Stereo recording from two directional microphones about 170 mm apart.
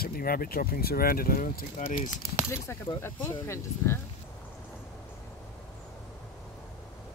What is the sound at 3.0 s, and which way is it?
Speech, 15° left (ahead or behind).